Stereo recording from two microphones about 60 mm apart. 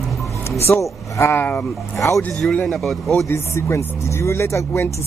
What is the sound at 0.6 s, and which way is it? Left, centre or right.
Speech, left.